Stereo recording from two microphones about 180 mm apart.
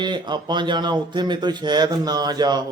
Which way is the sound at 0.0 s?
25° right (ahead or behind).